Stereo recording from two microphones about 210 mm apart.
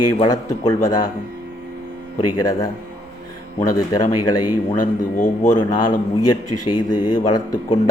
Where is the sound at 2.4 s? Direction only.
20° left (ahead or behind).